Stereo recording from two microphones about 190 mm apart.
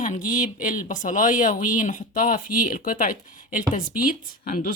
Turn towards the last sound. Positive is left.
turn(degrees=45)  # may be behind; listen again after turning